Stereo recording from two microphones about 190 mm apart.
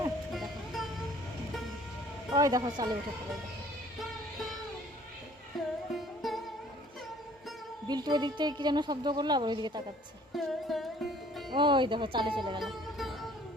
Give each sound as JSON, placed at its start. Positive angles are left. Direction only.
{"t": 0.3, "sound": "music", "side_deg": 0}
{"t": 2.3, "sound": "a woman's voice", "side_deg": -20}
{"t": 5.5, "sound": "music", "side_deg": 0}
{"t": 7.9, "sound": "a woman's voice", "side_deg": -20}
{"t": 10.3, "sound": "music", "side_deg": 0}
{"t": 11.5, "sound": "a woman's voice", "side_deg": -25}
{"t": 12.6, "sound": "music", "side_deg": 0}